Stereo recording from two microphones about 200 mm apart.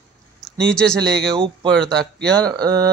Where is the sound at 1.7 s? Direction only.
Centre (ahead or behind).